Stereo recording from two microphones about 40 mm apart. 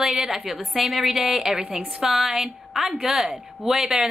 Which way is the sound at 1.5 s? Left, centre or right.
Centre.